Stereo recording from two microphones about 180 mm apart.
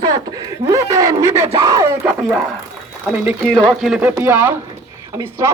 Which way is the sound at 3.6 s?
Centre (ahead or behind).